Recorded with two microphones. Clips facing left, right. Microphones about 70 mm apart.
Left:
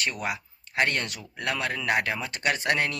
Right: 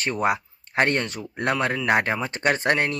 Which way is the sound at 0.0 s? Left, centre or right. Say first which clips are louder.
Right 6 dB; right.